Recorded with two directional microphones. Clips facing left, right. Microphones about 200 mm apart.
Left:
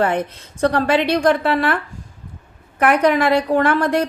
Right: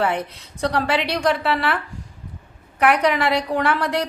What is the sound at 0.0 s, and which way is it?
A woman's voice, 50° left (ahead or behind).